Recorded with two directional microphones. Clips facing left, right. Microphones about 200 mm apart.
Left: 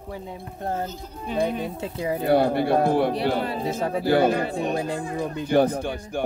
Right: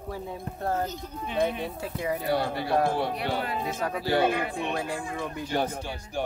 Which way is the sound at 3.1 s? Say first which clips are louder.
Left 6 dB; 35° left (ahead or behind).